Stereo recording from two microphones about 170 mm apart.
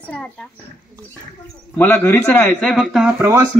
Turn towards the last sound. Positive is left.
turn(degrees=0)  # may be behind; listen again after turning